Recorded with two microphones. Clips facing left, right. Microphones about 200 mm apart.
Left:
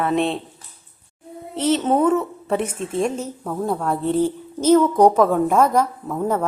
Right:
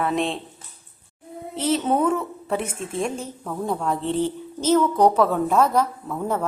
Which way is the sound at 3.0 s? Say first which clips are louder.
Left 4 dB; 5° left (ahead or behind).